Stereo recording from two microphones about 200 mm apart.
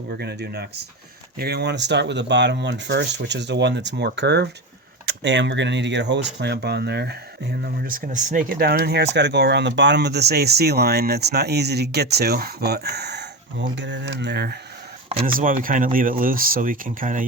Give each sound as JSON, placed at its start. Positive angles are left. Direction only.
{"t": 0.1, "sound": "speech", "side_deg": -55}
{"t": 15.3, "sound": "speech", "side_deg": -45}